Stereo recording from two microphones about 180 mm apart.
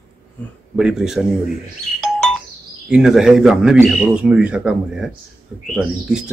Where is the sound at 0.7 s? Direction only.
5° right (ahead or behind).